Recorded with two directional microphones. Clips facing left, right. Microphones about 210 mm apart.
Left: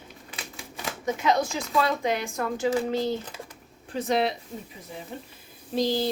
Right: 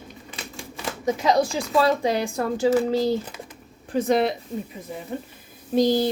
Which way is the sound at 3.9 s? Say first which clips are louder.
Right 5 dB; 50° right (ahead or behind).